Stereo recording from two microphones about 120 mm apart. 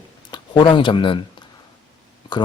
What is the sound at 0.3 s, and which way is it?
Speech, 40° left (ahead or behind).